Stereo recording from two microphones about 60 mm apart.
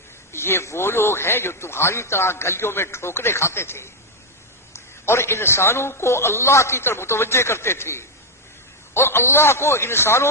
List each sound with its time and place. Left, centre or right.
0.3 s a man's voice: left